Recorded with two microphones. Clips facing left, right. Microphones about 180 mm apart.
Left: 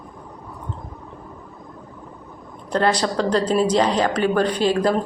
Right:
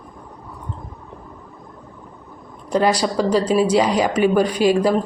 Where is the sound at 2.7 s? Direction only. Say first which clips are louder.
Right 2 dB; 10° right (ahead or behind).